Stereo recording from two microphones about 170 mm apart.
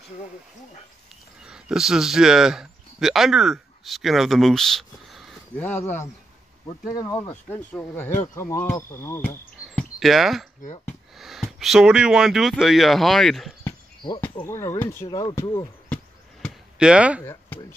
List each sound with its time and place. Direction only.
1.4 s speech: 5° right (ahead or behind)
5.6 s speech: 10° left (ahead or behind)
9.9 s speech: centre (ahead or behind)
10.6 s speech: 40° left (ahead or behind)
11.1 s speech: centre (ahead or behind)
13.7 s a sound: 25° left (ahead or behind)
14.4 s speech: 15° left (ahead or behind)
16.4 s basketball bounce: 5° right (ahead or behind)
17.2 s speech: 15° left (ahead or behind)